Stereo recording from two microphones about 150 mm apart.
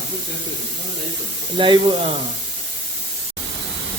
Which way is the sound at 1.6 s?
35° right (ahead or behind).